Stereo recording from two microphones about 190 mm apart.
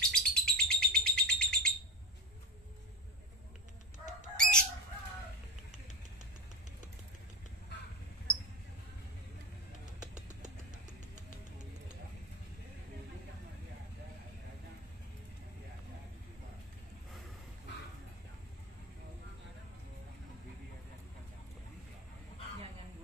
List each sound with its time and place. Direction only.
0.0 s bird: 5° left (ahead or behind)
4.4 s bird: 5° left (ahead or behind)
10.2 s music: 40° right (ahead or behind)